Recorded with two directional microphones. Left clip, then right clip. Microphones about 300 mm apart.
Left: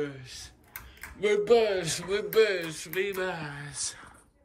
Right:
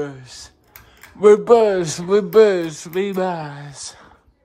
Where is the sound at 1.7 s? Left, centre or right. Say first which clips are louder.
Right 12 dB; right.